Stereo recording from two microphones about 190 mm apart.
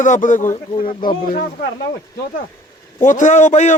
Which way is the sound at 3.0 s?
40° left (ahead or behind).